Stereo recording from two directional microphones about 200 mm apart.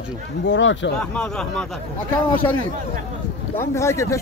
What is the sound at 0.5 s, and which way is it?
Speech, 70° left (ahead or behind).